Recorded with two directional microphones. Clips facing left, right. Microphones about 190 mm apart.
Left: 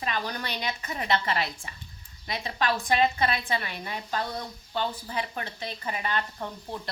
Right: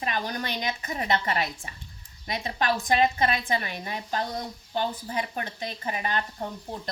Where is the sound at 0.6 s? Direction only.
40° right (ahead or behind).